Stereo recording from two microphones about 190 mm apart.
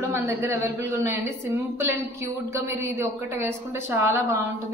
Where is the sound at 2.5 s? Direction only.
15° right (ahead or behind).